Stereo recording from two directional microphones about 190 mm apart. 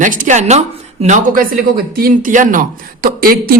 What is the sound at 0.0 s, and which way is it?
Speech, 45° right (ahead or behind).